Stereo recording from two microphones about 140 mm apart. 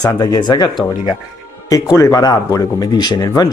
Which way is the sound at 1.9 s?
25° left (ahead or behind).